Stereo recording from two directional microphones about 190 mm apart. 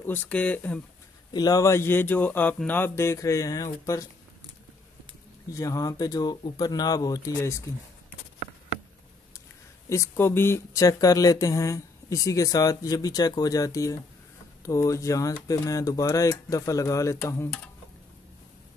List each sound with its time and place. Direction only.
0.0 s speech: 10° left (ahead or behind)
1.3 s speech: 20° left (ahead or behind)
5.5 s speech: 20° left (ahead or behind)
9.8 s speech: 15° left (ahead or behind)